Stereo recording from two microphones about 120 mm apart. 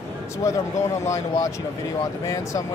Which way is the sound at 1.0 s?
25° left (ahead or behind).